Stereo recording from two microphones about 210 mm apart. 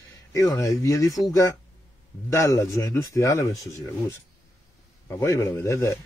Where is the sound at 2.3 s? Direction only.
15° left (ahead or behind).